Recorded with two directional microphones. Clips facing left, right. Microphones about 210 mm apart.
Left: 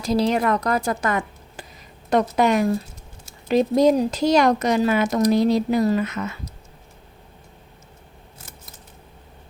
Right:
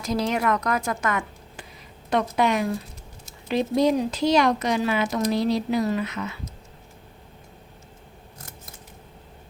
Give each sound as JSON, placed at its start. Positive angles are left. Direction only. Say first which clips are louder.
{"t": 0.0, "sound": "a woman's voice", "louder": "left 4 dB", "side_deg": 30}
{"t": 2.0, "sound": "speech", "louder": "left 4 dB", "side_deg": 45}